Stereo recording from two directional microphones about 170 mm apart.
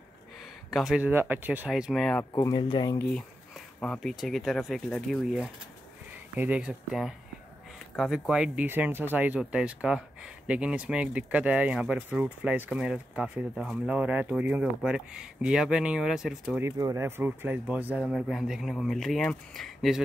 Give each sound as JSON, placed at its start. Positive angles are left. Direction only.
{"t": 0.7, "sound": "speech", "side_deg": 0}
{"t": 2.3, "sound": "speech", "side_deg": 20}
{"t": 3.0, "sound": "speech", "side_deg": 5}
{"t": 16.6, "sound": "speech", "side_deg": -15}